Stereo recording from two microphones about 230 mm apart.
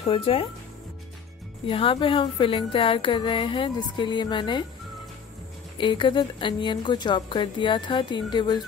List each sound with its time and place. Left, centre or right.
0.0 s a woman's voice: left
1.7 s a woman's voice: left
5.8 s a woman's voice: left